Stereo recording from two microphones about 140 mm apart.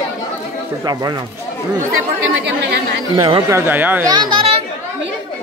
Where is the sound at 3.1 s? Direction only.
40° right (ahead or behind).